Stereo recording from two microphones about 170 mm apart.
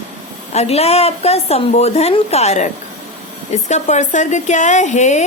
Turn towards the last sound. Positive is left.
turn(degrees=45)  # may be behind; listen again after turning